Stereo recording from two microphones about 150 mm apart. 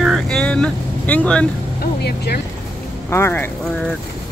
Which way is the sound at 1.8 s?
90° left.